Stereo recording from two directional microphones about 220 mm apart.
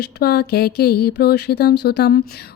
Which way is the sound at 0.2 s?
45° left (ahead or behind).